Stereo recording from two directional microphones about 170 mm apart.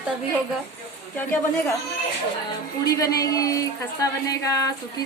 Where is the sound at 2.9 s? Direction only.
20° left (ahead or behind).